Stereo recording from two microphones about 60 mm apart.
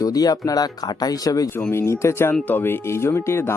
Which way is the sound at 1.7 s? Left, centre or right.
Left.